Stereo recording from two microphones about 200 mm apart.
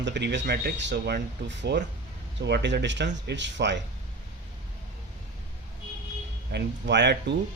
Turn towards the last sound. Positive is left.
turn(degrees=-60)  # may be behind; listen again after turning